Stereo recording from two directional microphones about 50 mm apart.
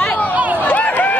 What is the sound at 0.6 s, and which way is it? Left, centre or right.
Run, left.